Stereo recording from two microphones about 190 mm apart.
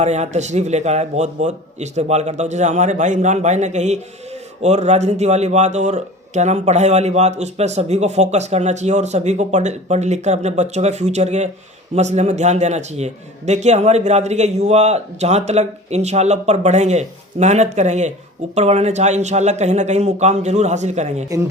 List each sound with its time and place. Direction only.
0.0 s speech: 35° right (ahead or behind)
21.2 s speech: 20° right (ahead or behind)